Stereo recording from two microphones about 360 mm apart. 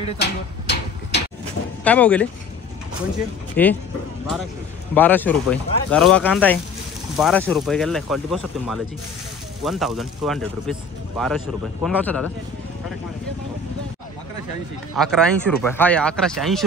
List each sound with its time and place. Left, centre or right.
0.2 s a sound: left
1.9 s speech: centre
3.6 s speech: centre
4.9 s speech: centre
15.0 s speech: centre